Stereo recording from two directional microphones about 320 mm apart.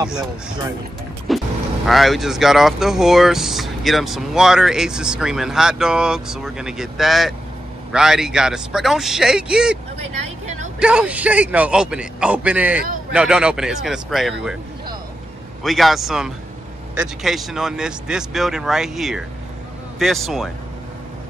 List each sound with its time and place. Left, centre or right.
1.3 s vehicle: centre
1.9 s speech: centre
9.9 s vehicle: right
10.8 s speech: centre
15.6 s speech: centre